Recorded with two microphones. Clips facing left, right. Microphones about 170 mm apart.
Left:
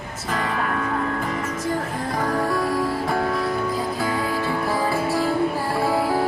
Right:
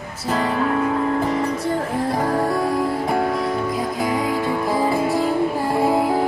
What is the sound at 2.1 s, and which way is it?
Music, 25° right (ahead or behind).